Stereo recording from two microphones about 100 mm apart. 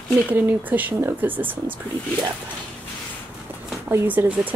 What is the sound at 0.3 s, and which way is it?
Speech, 20° right (ahead or behind).